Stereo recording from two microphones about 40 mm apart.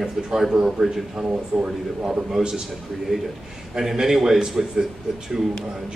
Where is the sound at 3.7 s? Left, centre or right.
Centre.